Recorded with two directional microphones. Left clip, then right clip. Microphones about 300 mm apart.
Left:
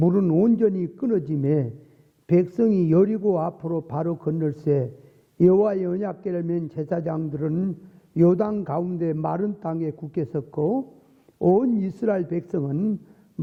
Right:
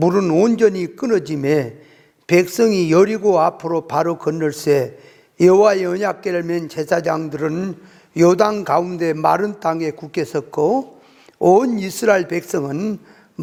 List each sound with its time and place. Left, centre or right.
0.0 s a man's voice: centre
10.6 s a man's voice: centre